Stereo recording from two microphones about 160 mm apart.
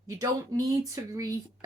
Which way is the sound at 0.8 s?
20° right (ahead or behind).